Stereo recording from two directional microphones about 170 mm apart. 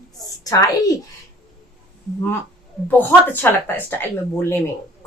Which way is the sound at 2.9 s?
10° left (ahead or behind).